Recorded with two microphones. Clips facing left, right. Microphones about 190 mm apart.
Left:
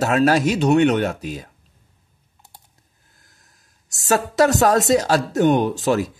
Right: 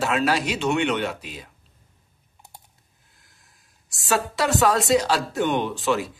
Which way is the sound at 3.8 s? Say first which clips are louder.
Left 4 dB; 40° left (ahead or behind).